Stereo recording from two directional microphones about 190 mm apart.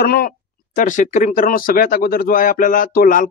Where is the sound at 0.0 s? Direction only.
50° left (ahead or behind).